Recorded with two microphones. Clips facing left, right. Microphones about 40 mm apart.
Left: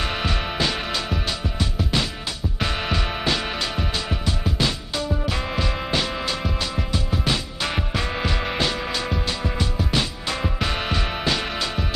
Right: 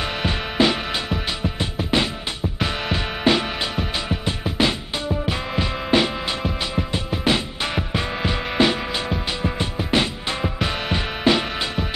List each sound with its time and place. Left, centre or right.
0.3 s music: centre
1.6 s music: right
3.3 s music: right
7.9 s music: centre
10.4 s music: centre
10.9 s music: centre